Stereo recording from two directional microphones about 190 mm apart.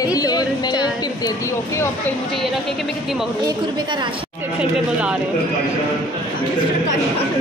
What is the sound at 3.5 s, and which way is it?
Speech, 25° right (ahead or behind).